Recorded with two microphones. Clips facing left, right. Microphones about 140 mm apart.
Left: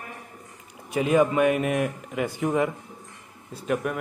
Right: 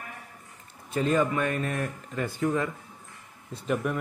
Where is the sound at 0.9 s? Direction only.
15° left (ahead or behind).